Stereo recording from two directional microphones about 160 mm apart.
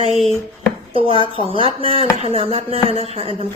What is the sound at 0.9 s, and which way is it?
Speech, 35° right (ahead or behind).